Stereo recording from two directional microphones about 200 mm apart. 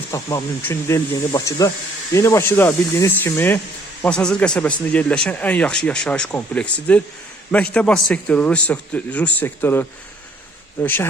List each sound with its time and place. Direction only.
0.1 s speech: 15° left (ahead or behind)